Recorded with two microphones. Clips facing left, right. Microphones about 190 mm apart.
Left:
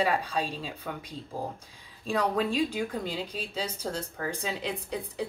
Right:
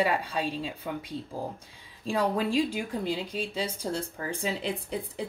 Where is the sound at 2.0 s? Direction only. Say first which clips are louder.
Even; 30° right (ahead or behind).